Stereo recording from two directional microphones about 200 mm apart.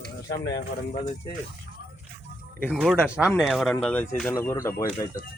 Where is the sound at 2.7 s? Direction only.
Centre (ahead or behind); by 5.2 s 15° left (ahead or behind).